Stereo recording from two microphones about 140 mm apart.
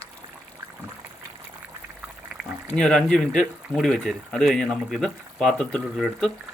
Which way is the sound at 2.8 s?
5° left (ahead or behind).